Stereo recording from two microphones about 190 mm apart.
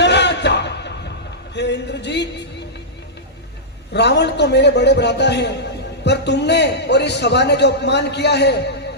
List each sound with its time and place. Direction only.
0.0 s a sound: 65° left (ahead or behind)
1.5 s a man's voice: 65° left (ahead or behind)
3.9 s a man's voice: 65° left (ahead or behind)